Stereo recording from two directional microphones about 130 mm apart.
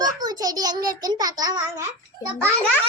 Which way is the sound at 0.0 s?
30° right (ahead or behind).